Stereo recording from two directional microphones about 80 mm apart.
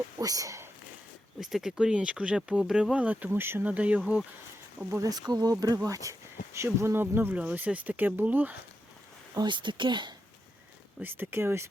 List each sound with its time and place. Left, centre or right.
0.2 s speech: right
1.4 s speech: centre
3.2 s speech: right
3.7 s speech: centre
5.0 s speech: right
9.5 s speech: right
11.0 s speech: right